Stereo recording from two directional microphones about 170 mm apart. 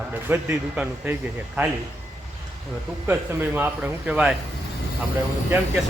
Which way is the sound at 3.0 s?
10° right (ahead or behind).